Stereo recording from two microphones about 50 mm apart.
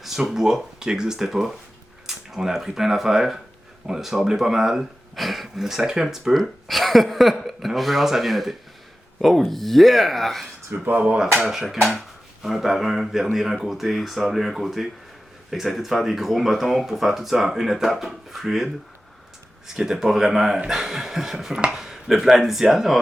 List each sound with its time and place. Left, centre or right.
0.0 s speech: centre
10.8 s speech: right
11.4 s speech: centre
21.7 s a sound: centre
22.0 s speech: centre